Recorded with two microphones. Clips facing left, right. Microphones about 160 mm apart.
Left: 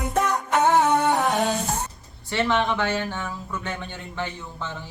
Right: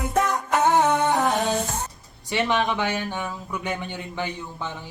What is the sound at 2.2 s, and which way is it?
Speech, 15° right (ahead or behind).